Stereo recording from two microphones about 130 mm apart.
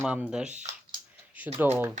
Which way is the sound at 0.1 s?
10° right (ahead or behind).